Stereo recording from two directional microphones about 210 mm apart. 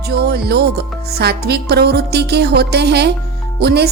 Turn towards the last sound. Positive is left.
turn(degrees=-50)  # may be behind; listen again after turning